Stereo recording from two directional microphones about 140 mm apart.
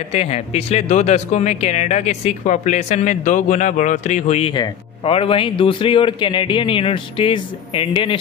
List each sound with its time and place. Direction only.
0.1 s speech: 50° left (ahead or behind)